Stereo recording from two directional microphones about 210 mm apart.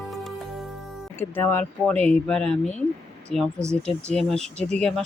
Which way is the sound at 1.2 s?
10° left (ahead or behind).